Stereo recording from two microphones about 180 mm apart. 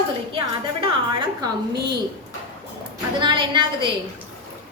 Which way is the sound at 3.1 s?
25° right (ahead or behind).